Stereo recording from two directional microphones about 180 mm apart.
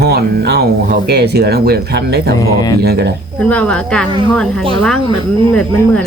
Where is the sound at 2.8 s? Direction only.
65° right (ahead or behind).